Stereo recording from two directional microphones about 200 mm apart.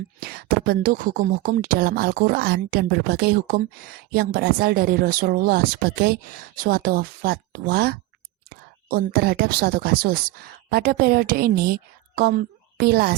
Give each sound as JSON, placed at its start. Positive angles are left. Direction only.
{"t": 0.2, "sound": "a woman's voice", "side_deg": -50}